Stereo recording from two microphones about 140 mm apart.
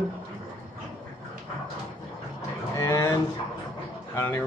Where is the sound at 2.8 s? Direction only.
20° left (ahead or behind).